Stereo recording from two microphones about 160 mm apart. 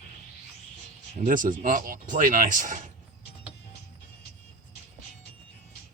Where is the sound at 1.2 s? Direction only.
55° right (ahead or behind).